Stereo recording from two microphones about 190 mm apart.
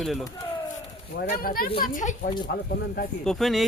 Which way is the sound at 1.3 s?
50° left (ahead or behind).